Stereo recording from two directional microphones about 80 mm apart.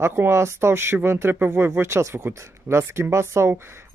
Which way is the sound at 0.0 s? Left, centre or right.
Right.